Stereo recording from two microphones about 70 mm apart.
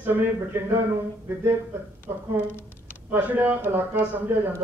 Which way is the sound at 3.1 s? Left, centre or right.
Right.